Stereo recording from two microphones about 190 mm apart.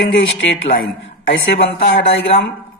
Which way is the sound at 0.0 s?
75° left (ahead or behind).